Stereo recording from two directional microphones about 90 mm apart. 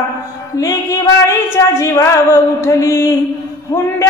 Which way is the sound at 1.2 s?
30° left (ahead or behind).